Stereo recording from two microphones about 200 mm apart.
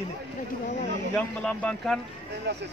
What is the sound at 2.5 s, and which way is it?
Speech, 55° right (ahead or behind).